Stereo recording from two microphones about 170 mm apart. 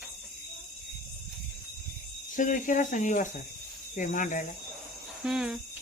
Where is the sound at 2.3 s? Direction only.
50° left (ahead or behind).